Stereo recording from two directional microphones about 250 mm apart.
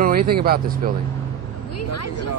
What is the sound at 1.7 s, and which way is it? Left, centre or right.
Speech, left.